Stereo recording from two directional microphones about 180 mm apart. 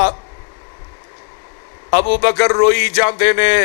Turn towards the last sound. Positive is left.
turn(degrees=20)  # may be behind; listen again after turning